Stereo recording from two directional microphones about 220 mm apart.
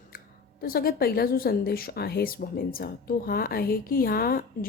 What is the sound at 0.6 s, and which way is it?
Speech, 40° left (ahead or behind).